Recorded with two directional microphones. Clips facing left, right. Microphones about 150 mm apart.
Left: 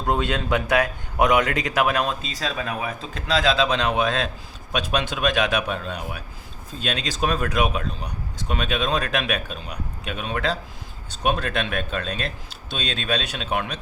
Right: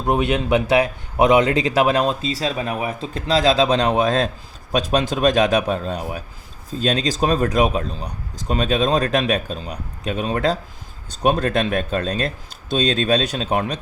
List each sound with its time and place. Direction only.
0.0 s a man's voice: 20° right (ahead or behind); by 13.7 s 35° right (ahead or behind)